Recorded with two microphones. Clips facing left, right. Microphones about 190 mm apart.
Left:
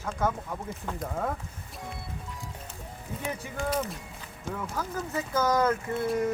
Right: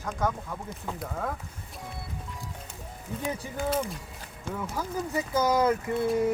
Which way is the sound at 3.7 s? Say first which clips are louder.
Right 1 dB; 5° left (ahead or behind).